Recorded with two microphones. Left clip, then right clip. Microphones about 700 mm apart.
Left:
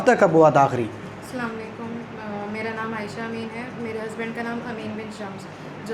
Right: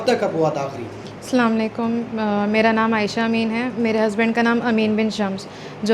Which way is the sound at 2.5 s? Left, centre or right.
Right.